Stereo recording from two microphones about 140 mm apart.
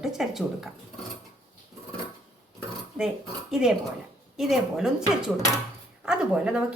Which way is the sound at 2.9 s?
5° right (ahead or behind).